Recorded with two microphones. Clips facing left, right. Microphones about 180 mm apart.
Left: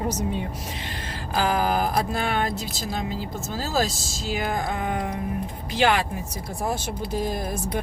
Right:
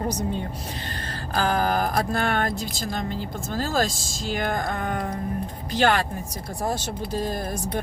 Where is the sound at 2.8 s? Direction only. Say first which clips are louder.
Left 1 dB; 5° left (ahead or behind).